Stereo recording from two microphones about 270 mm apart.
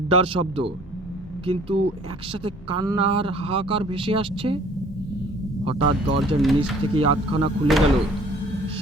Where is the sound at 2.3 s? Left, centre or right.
Centre.